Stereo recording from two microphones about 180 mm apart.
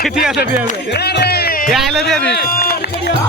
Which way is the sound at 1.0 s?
60° left (ahead or behind).